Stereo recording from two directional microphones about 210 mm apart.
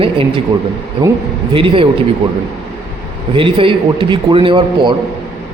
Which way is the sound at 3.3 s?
25° right (ahead or behind).